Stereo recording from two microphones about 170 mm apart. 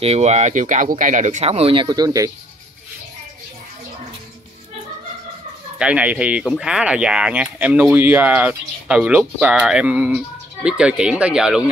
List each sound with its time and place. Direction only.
0.0 s speech: 40° right (ahead or behind); by 2.3 s 20° right (ahead or behind)
5.8 s speech: 5° right (ahead or behind)